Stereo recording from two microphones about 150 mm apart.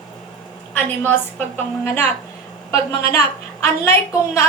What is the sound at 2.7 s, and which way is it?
Speech, 40° right (ahead or behind).